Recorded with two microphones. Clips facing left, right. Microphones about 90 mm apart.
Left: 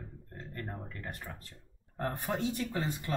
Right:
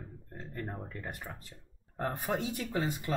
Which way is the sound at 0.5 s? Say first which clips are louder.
Right 2 dB; 10° right (ahead or behind).